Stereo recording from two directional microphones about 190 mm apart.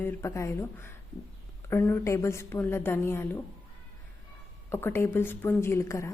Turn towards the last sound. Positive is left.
turn(degrees=15)  # may be behind; listen again after turning